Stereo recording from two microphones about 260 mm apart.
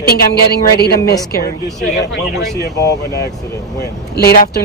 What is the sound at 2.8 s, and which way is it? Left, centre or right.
Speech, left.